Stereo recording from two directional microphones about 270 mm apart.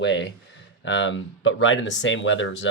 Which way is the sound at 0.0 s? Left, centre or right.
Left.